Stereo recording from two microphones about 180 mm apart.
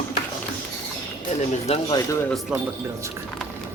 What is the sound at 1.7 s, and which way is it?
Speech, 25° left (ahead or behind).